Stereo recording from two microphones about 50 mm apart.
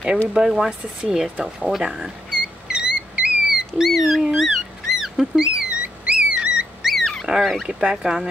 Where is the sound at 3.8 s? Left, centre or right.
Centre.